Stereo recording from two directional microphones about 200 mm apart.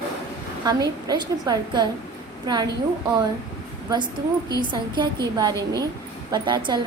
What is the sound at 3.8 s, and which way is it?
A woman's voice, 20° right (ahead or behind).